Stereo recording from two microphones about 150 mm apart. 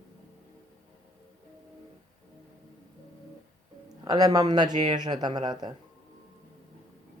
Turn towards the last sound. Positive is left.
turn(degrees=-30)  # may be behind; listen again after turning